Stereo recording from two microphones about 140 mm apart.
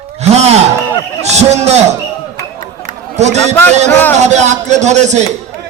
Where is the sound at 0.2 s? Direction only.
50° right (ahead or behind).